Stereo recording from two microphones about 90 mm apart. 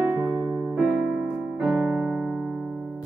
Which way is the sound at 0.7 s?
5° right (ahead or behind).